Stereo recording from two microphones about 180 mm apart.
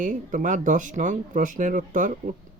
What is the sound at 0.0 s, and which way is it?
Speech, 45° right (ahead or behind).